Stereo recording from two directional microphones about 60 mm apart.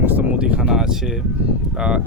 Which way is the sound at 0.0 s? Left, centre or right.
Right.